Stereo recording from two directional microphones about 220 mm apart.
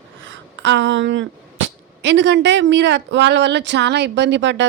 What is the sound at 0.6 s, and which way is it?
Speech, 55° right (ahead or behind).